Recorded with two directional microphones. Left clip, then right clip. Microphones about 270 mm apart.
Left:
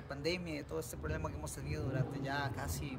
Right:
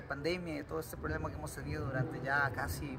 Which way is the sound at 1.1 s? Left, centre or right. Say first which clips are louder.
Right 2 dB; centre.